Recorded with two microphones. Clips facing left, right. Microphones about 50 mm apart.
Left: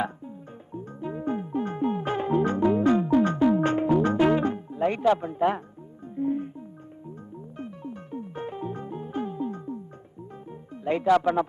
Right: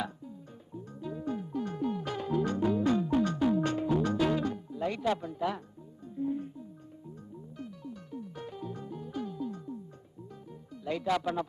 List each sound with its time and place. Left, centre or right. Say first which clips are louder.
0.0 s music: left 7 dB; left
5.2 s speech: left 9 dB; left
6.1 s music: left 6 dB; left
10.8 s speech: left 8 dB; left